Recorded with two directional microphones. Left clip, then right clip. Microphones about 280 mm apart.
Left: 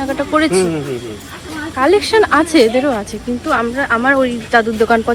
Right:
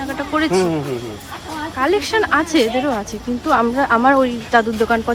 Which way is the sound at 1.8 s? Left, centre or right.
Centre.